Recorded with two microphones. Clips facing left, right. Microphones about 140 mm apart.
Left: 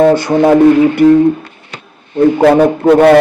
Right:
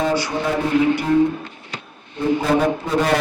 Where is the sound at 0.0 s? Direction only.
50° left (ahead or behind).